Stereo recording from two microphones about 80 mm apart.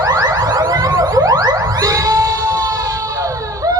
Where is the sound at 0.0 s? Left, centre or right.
Right.